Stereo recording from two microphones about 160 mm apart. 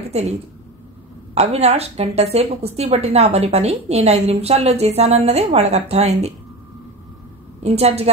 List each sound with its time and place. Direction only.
0.1 s a woman's voice: 40° right (ahead or behind)
7.6 s speech: 40° right (ahead or behind)